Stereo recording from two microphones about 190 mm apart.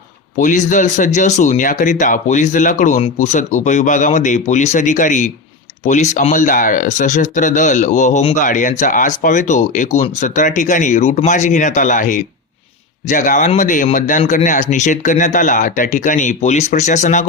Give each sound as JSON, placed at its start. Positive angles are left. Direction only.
{"t": 0.3, "sound": "speech", "side_deg": 40}